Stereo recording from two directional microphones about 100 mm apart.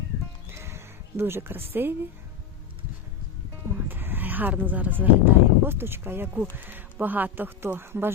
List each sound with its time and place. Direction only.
0.5 s music: 25° right (ahead or behind)
3.8 s speech: 20° right (ahead or behind)